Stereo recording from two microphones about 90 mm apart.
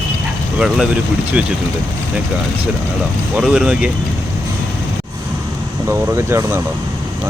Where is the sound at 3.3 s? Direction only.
10° right (ahead or behind).